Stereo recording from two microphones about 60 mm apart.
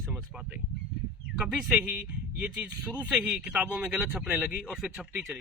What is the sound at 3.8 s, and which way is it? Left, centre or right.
Speech, centre.